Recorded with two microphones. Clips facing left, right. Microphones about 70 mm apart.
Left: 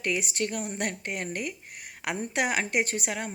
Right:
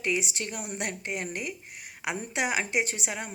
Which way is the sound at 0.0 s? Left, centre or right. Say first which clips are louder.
Left 1 dB; left.